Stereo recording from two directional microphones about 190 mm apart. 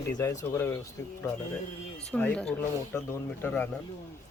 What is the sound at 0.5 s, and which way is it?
Speech, 15° left (ahead or behind).